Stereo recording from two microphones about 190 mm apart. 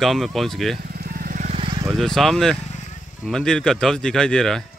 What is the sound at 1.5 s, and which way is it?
Vehicle, 30° right (ahead or behind).